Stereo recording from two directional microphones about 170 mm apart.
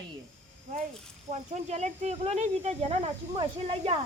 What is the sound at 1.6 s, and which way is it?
Speech, 40° right (ahead or behind).